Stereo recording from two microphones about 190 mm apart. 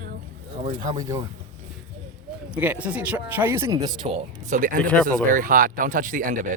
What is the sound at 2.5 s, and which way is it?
Speech, 5° right (ahead or behind).